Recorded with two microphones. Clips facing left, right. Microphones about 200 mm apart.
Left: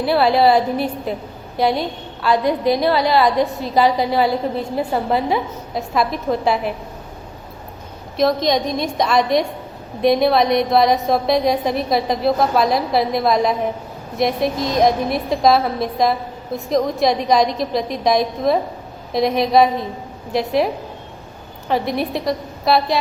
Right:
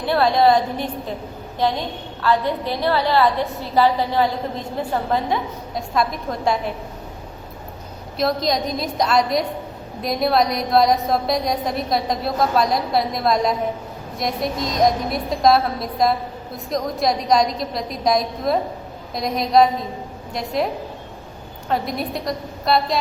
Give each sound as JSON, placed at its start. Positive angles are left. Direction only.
{"t": 0.0, "sound": "a woman's voice", "side_deg": 5}
{"t": 8.3, "sound": "a woman's voice", "side_deg": 0}
{"t": 21.7, "sound": "a woman's voice", "side_deg": 0}